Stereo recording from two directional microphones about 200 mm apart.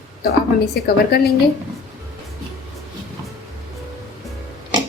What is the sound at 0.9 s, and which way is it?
Speech, 50° left (ahead or behind).